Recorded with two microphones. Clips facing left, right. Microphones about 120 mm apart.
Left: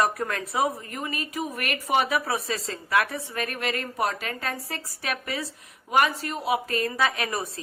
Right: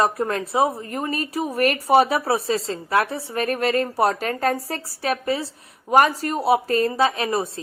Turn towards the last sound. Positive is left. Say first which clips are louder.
# right 6 dB
turn(degrees=-25)  # may be behind; listen again after turning